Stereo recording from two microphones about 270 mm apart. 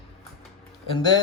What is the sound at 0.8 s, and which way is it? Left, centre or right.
Speech, centre.